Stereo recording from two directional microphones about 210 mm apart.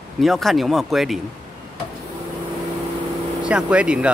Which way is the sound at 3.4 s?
5° right (ahead or behind).